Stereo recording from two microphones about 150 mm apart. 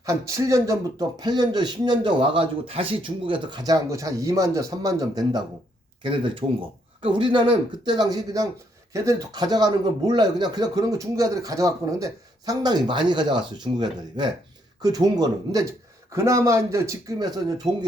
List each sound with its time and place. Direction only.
0.0 s speech: 20° right (ahead or behind)